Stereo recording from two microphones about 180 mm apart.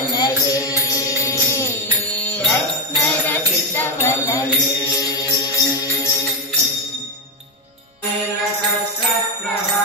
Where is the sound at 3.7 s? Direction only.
15° left (ahead or behind).